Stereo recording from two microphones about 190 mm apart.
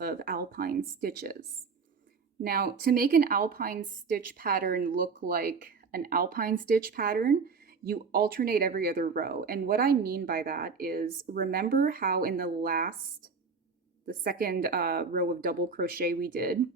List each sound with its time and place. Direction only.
0.0 s a woman's voice: 50° right (ahead or behind)
2.4 s a woman's voice: 55° right (ahead or behind)
14.0 s a woman's voice: 50° right (ahead or behind)